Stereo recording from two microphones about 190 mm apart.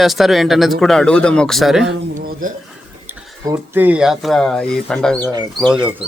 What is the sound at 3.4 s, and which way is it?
Speech, 10° right (ahead or behind).